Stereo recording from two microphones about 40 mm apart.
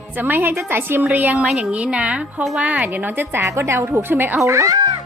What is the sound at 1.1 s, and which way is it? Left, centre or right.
Speech, right.